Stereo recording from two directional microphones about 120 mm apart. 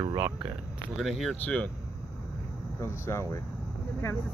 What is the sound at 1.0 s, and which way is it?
Speech, centre (ahead or behind).